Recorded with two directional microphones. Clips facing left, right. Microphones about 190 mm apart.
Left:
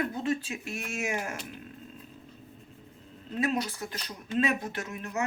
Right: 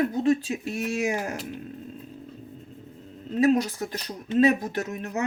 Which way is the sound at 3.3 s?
40° right (ahead or behind).